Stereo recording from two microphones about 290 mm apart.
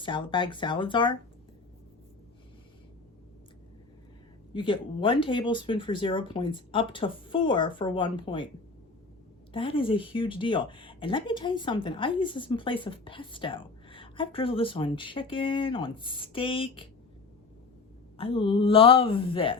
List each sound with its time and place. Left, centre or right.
0.0 s speech: centre
4.5 s speech: centre
9.5 s speech: centre
18.2 s a woman's voice: centre